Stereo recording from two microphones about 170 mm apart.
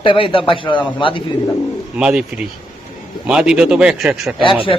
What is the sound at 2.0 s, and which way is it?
A man's voice, 5° right (ahead or behind).